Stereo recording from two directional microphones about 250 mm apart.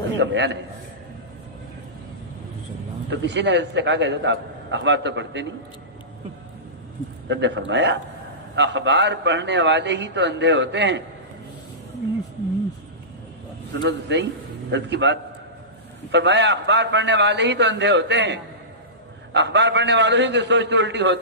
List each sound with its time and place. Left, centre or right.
0.2 s a man's voice: right
3.1 s a man's voice: right
7.2 s a man's voice: right
13.8 s a man's voice: right